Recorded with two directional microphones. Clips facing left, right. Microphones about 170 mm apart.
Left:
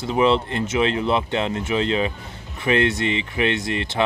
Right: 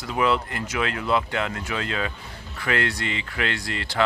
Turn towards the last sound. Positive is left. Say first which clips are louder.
# left 5 dB
turn(degrees=20)  # may be behind; listen again after turning